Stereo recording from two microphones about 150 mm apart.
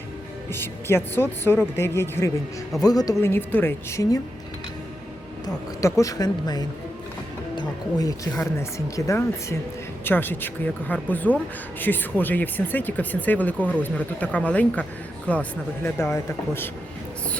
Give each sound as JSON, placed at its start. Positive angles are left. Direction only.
{"t": 0.6, "sound": "speech", "side_deg": 15}
{"t": 5.8, "sound": "speech", "side_deg": 20}